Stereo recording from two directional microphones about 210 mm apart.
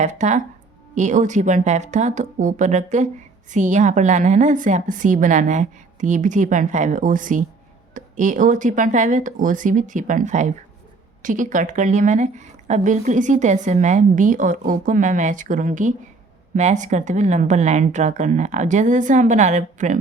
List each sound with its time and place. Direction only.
0.0 s a woman's voice: 35° right (ahead or behind)